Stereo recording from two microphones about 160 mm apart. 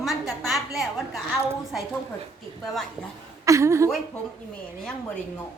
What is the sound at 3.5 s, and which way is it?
Speech, 20° right (ahead or behind).